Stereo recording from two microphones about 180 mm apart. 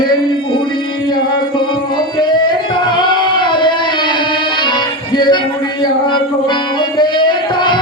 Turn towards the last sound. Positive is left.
turn(degrees=25)  # may be behind; listen again after turning